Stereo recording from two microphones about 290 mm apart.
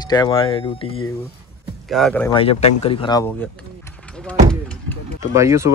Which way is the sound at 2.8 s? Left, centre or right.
Centre.